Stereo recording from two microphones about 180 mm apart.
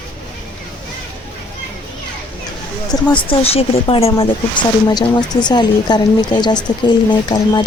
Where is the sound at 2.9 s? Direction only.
20° left (ahead or behind).